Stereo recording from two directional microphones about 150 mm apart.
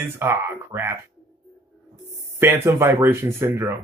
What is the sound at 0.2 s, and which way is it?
Speech, 15° right (ahead or behind).